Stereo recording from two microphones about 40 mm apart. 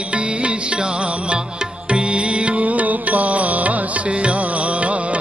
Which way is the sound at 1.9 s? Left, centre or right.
Right.